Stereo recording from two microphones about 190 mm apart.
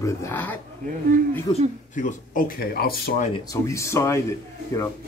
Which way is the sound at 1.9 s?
45° left (ahead or behind).